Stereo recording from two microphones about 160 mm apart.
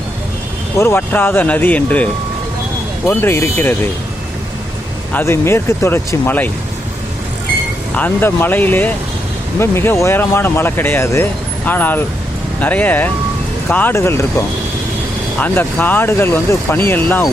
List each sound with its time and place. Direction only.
0.8 s speech: 15° left (ahead or behind)
3.1 s speech: 15° left (ahead or behind)
5.1 s speech: 15° left (ahead or behind)
7.9 s speech: 10° left (ahead or behind)
15.4 s speech: 10° left (ahead or behind)